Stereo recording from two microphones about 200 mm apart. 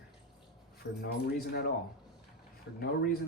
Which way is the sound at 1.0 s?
50° left (ahead or behind).